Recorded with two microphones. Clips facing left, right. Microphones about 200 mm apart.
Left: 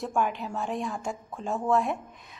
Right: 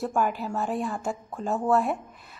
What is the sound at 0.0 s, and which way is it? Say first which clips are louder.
A woman's voice: right 2 dB; 5° right (ahead or behind).